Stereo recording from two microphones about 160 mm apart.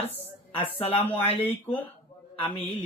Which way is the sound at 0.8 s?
40° left (ahead or behind).